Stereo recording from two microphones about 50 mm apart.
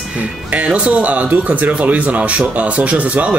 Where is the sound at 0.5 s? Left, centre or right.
Right.